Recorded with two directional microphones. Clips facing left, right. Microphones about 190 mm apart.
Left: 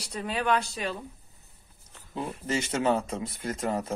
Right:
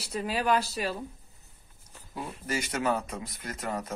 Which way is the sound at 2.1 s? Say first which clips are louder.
Left 3 dB; 25° left (ahead or behind).